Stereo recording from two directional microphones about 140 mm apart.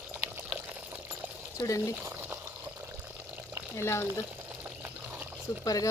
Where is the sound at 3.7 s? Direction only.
20° left (ahead or behind).